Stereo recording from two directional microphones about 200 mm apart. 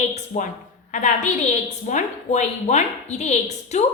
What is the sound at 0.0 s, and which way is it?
A woman's voice, 35° left (ahead or behind).